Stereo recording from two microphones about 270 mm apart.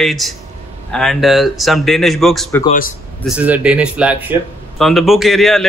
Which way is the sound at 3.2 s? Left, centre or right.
Centre.